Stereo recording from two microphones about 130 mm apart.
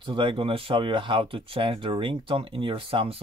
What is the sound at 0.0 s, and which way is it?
Speech, 40° right (ahead or behind).